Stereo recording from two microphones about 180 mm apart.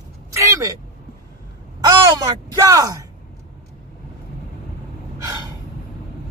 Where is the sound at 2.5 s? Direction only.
20° right (ahead or behind).